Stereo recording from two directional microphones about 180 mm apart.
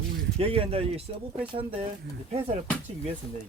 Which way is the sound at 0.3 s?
30° right (ahead or behind).